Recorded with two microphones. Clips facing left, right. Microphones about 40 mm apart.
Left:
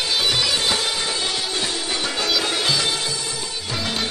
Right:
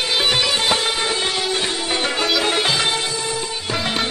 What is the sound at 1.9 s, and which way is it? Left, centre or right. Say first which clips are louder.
Music: right 4 dB; right.